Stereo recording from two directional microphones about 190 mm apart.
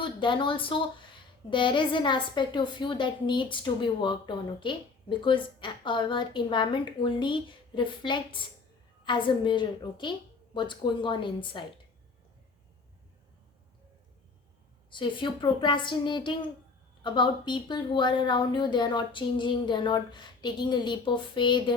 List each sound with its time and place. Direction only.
0.0 s a woman's voice: 25° left (ahead or behind)
14.8 s a woman's voice: 25° left (ahead or behind)